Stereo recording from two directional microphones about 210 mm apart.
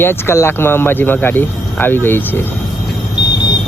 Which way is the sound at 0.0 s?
10° left (ahead or behind).